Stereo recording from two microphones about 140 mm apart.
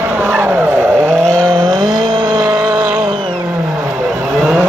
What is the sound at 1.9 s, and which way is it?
Vehicle, 30° right (ahead or behind).